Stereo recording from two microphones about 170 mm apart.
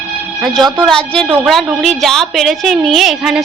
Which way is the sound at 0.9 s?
5° left (ahead or behind).